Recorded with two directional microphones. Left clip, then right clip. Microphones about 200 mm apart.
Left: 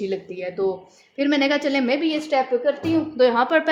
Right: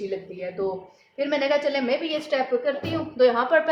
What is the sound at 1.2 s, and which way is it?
A woman's voice, 55° left (ahead or behind).